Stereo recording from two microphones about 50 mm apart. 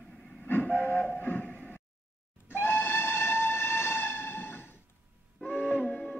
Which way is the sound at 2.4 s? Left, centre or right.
Left.